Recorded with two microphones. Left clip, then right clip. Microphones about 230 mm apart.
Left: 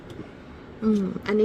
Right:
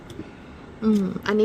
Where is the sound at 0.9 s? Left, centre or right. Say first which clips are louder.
Right 2 dB; right.